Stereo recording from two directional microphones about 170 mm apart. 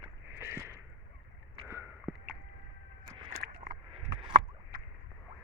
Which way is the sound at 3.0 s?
30° right (ahead or behind).